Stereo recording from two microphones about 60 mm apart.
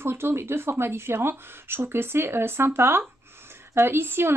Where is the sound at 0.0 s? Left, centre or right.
Right.